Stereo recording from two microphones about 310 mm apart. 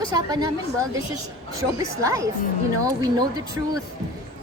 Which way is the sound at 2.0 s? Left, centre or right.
Centre.